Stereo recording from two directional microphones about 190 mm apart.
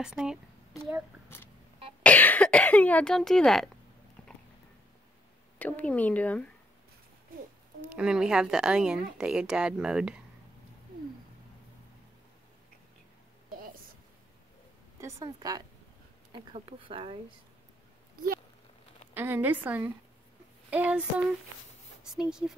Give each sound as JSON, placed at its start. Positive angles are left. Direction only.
{"t": 0.0, "sound": "a woman's voice", "side_deg": -5}
{"t": 2.0, "sound": "speech", "side_deg": 10}
{"t": 4.2, "sound": "dog", "side_deg": 5}
{"t": 5.6, "sound": "speech", "side_deg": 10}
{"t": 7.9, "sound": "a woman's voice", "side_deg": -5}
{"t": 13.5, "sound": "a sound", "side_deg": -45}
{"t": 15.0, "sound": "speech", "side_deg": -15}
{"t": 19.1, "sound": "speech", "side_deg": -10}
{"t": 22.0, "sound": "a woman's voice", "side_deg": -5}